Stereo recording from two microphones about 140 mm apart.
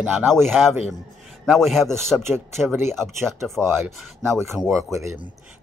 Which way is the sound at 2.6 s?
15° right (ahead or behind).